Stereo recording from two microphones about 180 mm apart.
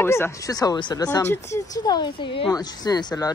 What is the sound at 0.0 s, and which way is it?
Speech, 15° left (ahead or behind).